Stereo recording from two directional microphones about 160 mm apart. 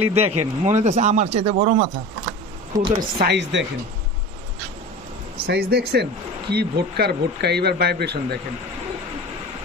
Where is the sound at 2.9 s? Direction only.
85° right.